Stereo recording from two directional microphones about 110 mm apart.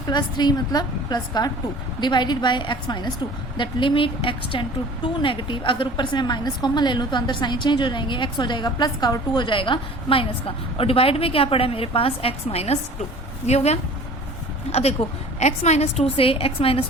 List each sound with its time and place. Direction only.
0.1 s a woman's voice: 40° left (ahead or behind); by 12.8 s 70° left (ahead or behind)
13.5 s speech: 80° left
14.7 s speech: 70° left (ahead or behind)
15.4 s a woman's voice: 90° left; by 16.8 s 55° left (ahead or behind)